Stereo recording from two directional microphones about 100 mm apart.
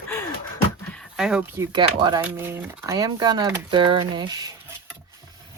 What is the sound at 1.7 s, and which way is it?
Speech, 50° right (ahead or behind).